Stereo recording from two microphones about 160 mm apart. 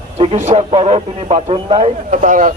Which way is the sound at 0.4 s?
45° right (ahead or behind).